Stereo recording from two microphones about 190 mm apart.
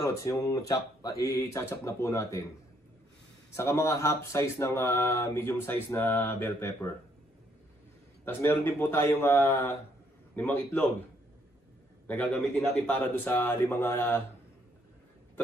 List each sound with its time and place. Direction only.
0.0 s speech: 15° left (ahead or behind)
3.5 s speech: 15° left (ahead or behind)
8.3 s speech: 10° left (ahead or behind)
12.1 s speech: 5° left (ahead or behind)